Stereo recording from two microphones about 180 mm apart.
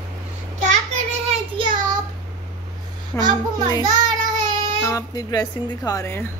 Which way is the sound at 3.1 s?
15° left (ahead or behind).